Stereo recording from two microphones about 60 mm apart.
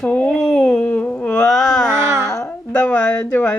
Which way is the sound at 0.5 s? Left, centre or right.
Left.